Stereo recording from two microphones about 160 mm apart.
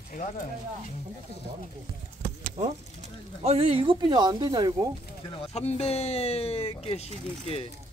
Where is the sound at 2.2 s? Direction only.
40° right (ahead or behind).